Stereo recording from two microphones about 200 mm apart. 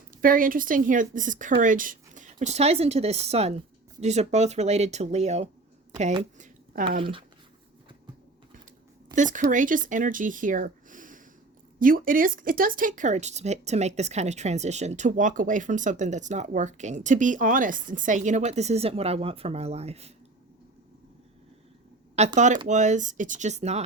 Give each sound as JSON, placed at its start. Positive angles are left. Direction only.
{"t": 0.2, "sound": "speech", "side_deg": -45}
{"t": 7.0, "sound": "speech", "side_deg": -25}
{"t": 9.1, "sound": "speech", "side_deg": -40}
{"t": 22.2, "sound": "speech", "side_deg": -35}